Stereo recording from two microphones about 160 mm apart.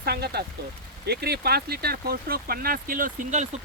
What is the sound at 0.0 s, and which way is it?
Speech, 85° right.